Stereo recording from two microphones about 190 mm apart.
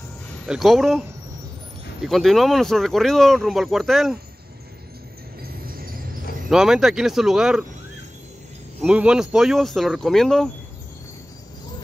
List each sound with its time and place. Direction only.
0.5 s speech: centre (ahead or behind)
5.4 s vehicle: 50° right (ahead or behind)
6.5 s speech: 5° right (ahead or behind)
8.8 s speech: 5° right (ahead or behind)